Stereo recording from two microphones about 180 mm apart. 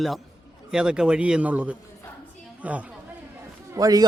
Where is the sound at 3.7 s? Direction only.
20° right (ahead or behind).